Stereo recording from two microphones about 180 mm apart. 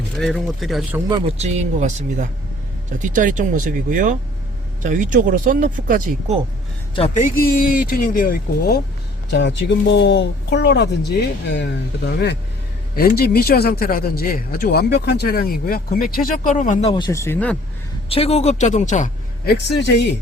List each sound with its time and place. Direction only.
0.2 s speech: centre (ahead or behind)
1.4 s speech: 40° right (ahead or behind)
7.1 s speech: 50° left (ahead or behind)
9.3 s speech: 80° left; by 16.9 s 45° left (ahead or behind)
16.9 s speech: 20° left (ahead or behind)
18.1 s speech: 35° left (ahead or behind)
19.5 s speech: 65° left (ahead or behind)